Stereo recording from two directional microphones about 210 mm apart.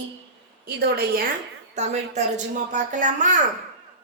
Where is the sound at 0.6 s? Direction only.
45° right (ahead or behind).